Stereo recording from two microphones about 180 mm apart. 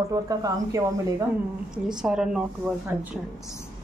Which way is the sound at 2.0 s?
5° right (ahead or behind).